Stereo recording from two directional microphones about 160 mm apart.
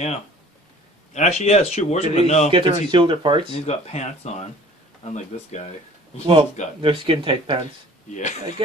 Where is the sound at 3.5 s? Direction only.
40° left (ahead or behind).